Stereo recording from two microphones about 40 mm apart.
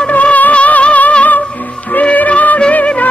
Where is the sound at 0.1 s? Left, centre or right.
Left.